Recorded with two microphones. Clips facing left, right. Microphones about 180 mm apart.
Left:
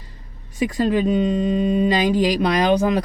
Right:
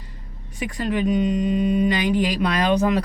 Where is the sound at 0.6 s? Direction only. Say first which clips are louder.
Left 4 dB; 25° left (ahead or behind).